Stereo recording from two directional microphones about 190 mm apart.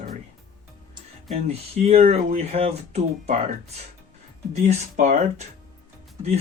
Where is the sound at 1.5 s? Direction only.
35° right (ahead or behind).